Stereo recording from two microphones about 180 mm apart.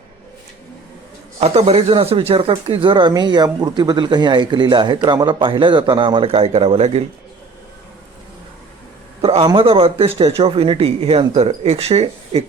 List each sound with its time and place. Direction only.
1.4 s speech: 35° right (ahead or behind)
9.2 s speech: 30° right (ahead or behind)